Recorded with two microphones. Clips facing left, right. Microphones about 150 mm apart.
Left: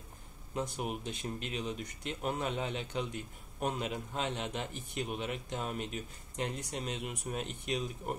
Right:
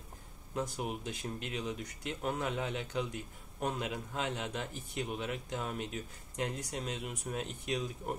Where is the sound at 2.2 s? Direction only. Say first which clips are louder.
Even; 10° left (ahead or behind).